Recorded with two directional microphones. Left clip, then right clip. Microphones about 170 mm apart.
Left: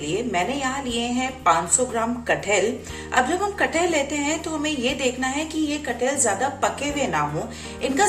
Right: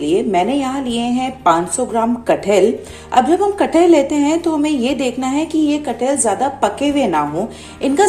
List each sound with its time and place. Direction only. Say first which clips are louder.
0.0 s a woman's voice: right 9 dB; 35° right (ahead or behind)